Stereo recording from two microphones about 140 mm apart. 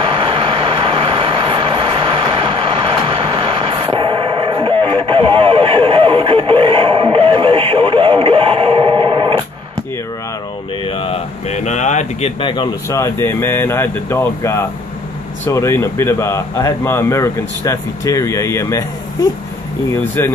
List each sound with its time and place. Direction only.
0.0 s vehicle: 40° right (ahead or behind)
5.0 s radio: 40° right (ahead or behind)
10.9 s a sound: 40° left (ahead or behind)
12.4 s speech: 35° left (ahead or behind)
12.9 s speech: 20° left (ahead or behind)
20.2 s speech: 15° left (ahead or behind)